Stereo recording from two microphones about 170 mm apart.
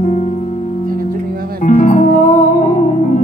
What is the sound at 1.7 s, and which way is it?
Music, 50° left (ahead or behind).